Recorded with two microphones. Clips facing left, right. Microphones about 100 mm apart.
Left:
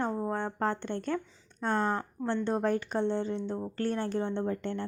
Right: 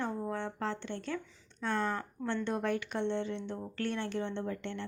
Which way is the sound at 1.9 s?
25° left (ahead or behind).